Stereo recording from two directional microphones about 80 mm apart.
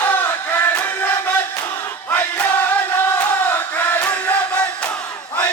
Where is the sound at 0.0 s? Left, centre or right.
Left.